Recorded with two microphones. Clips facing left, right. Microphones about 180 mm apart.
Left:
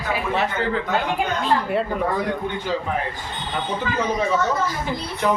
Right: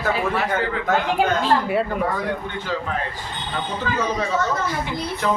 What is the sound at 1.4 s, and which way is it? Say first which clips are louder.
Speech: right 1 dB; 5° right (ahead or behind).